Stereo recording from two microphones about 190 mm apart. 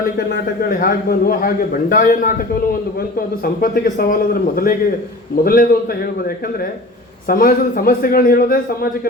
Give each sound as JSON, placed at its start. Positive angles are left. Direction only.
{"t": 0.7, "sound": "a man's voice", "side_deg": 45}
{"t": 3.4, "sound": "a man's voice", "side_deg": 50}